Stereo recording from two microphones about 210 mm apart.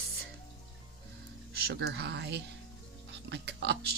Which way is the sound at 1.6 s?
50° right (ahead or behind).